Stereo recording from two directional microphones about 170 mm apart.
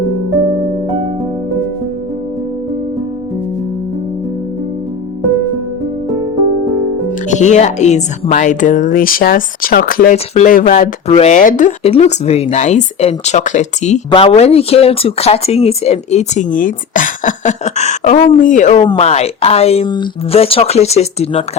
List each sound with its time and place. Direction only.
7.3 s speech: 45° left (ahead or behind); by 10.2 s 60° left (ahead or behind)
10.3 s speech: 50° left (ahead or behind)
11.9 s speech: 40° left (ahead or behind)